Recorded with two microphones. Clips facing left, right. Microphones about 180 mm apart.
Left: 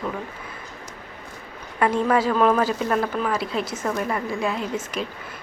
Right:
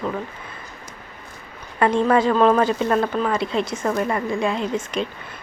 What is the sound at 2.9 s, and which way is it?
Speech, 25° right (ahead or behind).